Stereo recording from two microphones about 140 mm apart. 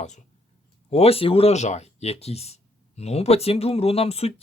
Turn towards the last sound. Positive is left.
turn(degrees=45)  # may be behind; listen again after turning